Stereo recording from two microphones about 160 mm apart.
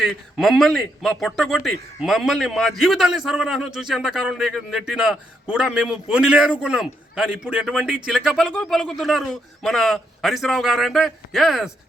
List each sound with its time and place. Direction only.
0.0 s a man's voice: centre (ahead or behind)